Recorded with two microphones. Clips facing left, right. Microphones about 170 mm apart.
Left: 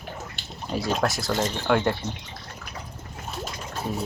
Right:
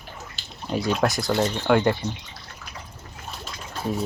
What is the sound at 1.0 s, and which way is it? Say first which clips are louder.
Speech: right 3 dB; centre (ahead or behind).